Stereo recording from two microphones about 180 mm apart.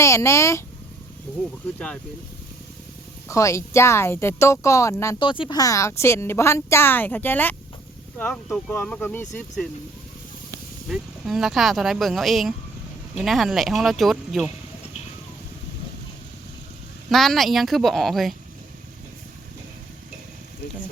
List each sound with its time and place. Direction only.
0.0 s a woman's voice: 15° left (ahead or behind)
3.2 s a woman's voice: 15° left (ahead or behind)
5.2 s a woman's voice: 25° left (ahead or behind); by 9.6 s 10° left (ahead or behind)
10.8 s speech: centre (ahead or behind)
17.1 s speech: centre (ahead or behind)